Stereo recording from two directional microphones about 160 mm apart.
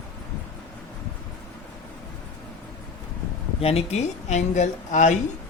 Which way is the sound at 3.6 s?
40° left (ahead or behind).